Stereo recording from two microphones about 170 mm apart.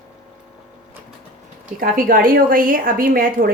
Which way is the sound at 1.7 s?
55° right (ahead or behind).